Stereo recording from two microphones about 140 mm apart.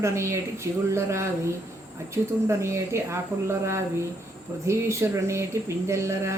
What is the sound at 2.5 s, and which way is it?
A woman's voice, 20° right (ahead or behind).